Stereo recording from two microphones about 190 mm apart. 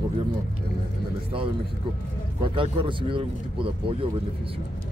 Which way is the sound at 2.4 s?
25° right (ahead or behind).